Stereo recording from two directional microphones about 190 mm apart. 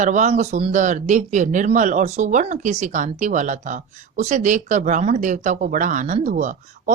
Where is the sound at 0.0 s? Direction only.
40° right (ahead or behind).